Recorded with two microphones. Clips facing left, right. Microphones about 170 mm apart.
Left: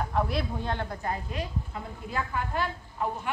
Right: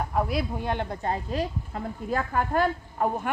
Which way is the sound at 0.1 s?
5° right (ahead or behind).